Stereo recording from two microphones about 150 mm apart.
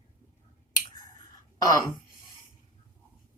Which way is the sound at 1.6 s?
25° left (ahead or behind).